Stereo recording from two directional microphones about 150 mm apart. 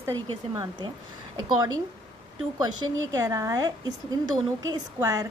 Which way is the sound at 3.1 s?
20° right (ahead or behind).